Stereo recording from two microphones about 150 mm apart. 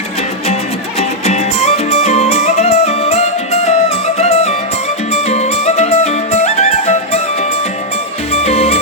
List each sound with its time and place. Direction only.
0.9 s music: 45° left (ahead or behind)
8.3 s music: 45° left (ahead or behind)